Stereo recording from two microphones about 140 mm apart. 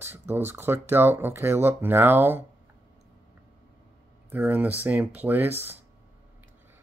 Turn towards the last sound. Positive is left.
turn(degrees=-15)  # may be behind; listen again after turning